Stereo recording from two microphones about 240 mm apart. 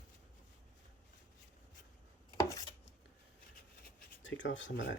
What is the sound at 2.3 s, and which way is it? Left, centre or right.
Chopping, centre.